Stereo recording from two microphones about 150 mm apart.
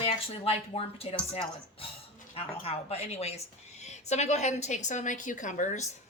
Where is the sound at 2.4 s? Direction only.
40° left (ahead or behind).